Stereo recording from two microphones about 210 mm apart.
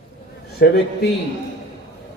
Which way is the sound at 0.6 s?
50° left (ahead or behind).